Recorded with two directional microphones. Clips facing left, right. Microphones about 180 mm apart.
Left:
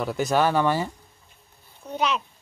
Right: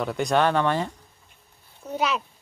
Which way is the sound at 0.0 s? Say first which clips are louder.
Even; 5° left (ahead or behind).